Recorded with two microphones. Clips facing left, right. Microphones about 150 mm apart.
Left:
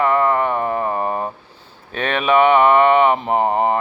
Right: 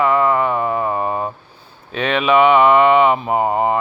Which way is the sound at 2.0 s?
50° left (ahead or behind).